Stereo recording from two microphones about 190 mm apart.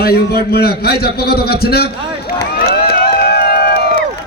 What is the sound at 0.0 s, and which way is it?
A man's voice, 55° left (ahead or behind).